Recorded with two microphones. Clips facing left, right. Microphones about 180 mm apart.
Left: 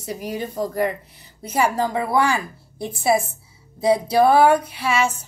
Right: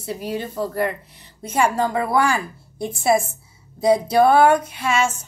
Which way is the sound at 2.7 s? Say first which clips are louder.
Right 2 dB; 35° left (ahead or behind).